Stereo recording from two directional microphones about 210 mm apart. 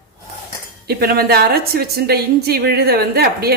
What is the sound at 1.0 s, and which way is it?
A woman's voice, 45° right (ahead or behind).